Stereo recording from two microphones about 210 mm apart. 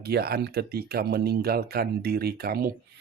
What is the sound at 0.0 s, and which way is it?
Speech, 50° right (ahead or behind).